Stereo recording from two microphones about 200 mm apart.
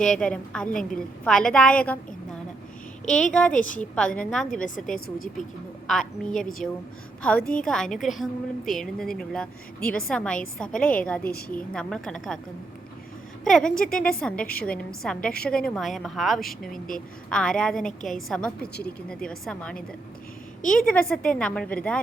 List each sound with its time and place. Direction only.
0.0 s a woman's voice: 5° left (ahead or behind)
4.6 s a woman's voice: 40° left (ahead or behind)
5.9 s a woman's voice: 5° left (ahead or behind)
11.2 s a woman's voice: 50° left (ahead or behind)
11.5 s a woman's voice: 5° left (ahead or behind)
13.4 s a woman's voice: 5° left (ahead or behind)
16.7 s a woman's voice: 45° left (ahead or behind)
17.2 s a woman's voice: 5° left (ahead or behind)